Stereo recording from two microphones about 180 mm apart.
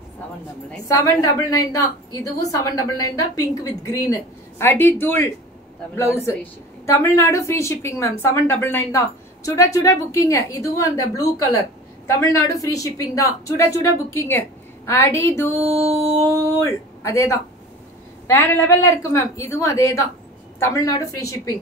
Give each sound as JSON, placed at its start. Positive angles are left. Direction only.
{"t": 0.8, "sound": "a woman's voice", "side_deg": 20}
{"t": 16.6, "sound": "a woman's voice", "side_deg": 15}